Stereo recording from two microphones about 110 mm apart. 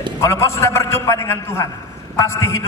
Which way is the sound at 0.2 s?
25° left (ahead or behind).